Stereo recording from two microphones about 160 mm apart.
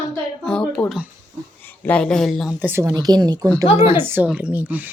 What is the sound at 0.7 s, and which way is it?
A woman's voice, 5° left (ahead or behind).